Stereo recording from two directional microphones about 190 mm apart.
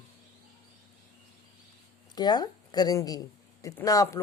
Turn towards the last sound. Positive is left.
turn(degrees=20)  # may be behind; listen again after turning